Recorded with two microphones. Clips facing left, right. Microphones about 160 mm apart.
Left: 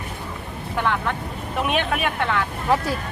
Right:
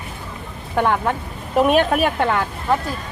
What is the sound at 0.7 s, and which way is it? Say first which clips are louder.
Speech: right 5 dB; 50° right (ahead or behind).